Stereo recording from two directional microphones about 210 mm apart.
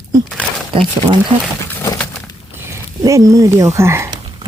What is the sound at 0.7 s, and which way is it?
Speech, 20° right (ahead or behind).